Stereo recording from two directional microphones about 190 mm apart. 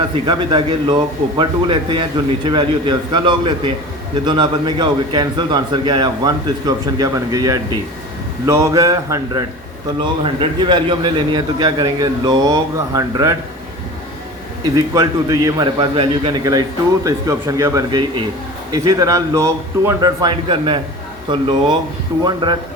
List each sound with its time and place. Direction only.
0.3 s a man's voice: 25° right (ahead or behind)
14.8 s a man's voice: 20° right (ahead or behind)
22.2 s a man's voice: 25° right (ahead or behind)